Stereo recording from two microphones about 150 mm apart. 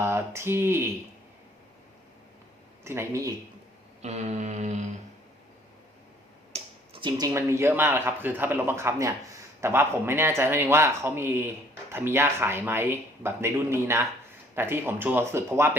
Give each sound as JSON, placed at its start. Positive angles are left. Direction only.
{"t": 0.0, "sound": "speech", "side_deg": -15}
{"t": 2.8, "sound": "speech", "side_deg": -15}
{"t": 4.0, "sound": "a sound", "side_deg": -50}
{"t": 6.5, "sound": "finger snapping", "side_deg": -35}
{"t": 7.2, "sound": "speech", "side_deg": -20}